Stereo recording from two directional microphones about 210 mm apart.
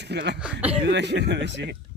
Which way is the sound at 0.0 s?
55° right (ahead or behind).